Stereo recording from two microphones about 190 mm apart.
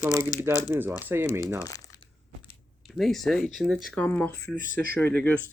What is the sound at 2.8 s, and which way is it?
Speech, centre (ahead or behind).